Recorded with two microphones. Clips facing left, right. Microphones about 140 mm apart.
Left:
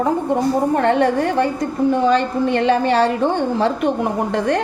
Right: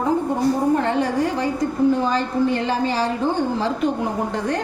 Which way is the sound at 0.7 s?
60° left (ahead or behind).